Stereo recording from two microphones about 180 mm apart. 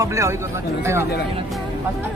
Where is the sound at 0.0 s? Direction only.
15° right (ahead or behind).